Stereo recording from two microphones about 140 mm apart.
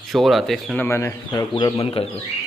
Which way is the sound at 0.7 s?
15° left (ahead or behind).